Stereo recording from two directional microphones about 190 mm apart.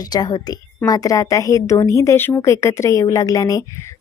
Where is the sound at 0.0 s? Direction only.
20° left (ahead or behind).